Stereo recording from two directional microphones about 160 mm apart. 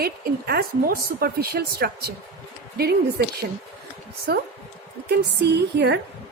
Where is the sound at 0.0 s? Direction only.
75° right (ahead or behind).